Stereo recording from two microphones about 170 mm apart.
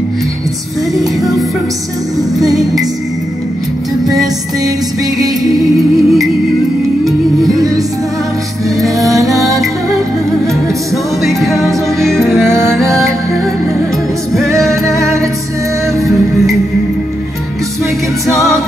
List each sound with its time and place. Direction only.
0.9 s music: centre (ahead or behind)
5.6 s music: centre (ahead or behind)
8.8 s music: centre (ahead or behind)
11.2 s music: centre (ahead or behind)
14.8 s music: 15° right (ahead or behind)